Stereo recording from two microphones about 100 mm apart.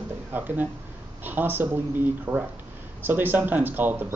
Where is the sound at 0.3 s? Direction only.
15° right (ahead or behind).